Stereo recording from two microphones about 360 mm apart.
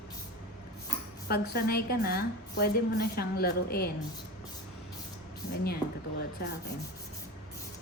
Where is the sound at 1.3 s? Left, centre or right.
Left.